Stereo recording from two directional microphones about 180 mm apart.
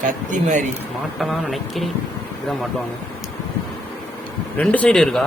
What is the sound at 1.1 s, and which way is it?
Speech, centre (ahead or behind).